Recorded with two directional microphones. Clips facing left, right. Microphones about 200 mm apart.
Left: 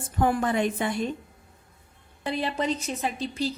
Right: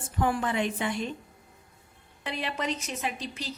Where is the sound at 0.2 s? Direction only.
45° left (ahead or behind).